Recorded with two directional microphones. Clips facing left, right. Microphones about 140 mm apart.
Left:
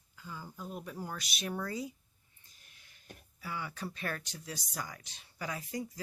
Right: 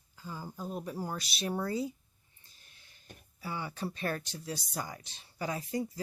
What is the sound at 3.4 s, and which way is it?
Speech, 30° right (ahead or behind).